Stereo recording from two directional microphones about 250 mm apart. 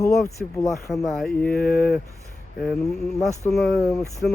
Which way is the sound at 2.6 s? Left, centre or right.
Centre.